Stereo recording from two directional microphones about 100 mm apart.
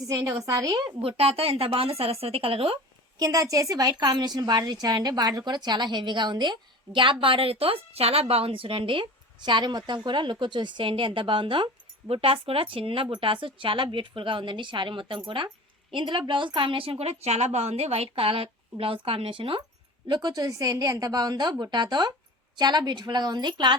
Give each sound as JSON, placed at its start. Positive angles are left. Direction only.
{"t": 0.0, "sound": "a woman's voice", "side_deg": -35}
{"t": 1.0, "sound": "a woman's voice", "side_deg": -90}
{"t": 3.2, "sound": "a woman's voice", "side_deg": -40}
{"t": 20.1, "sound": "a woman's voice", "side_deg": -45}